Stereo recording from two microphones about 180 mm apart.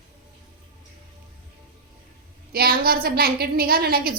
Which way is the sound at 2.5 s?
55° right (ahead or behind).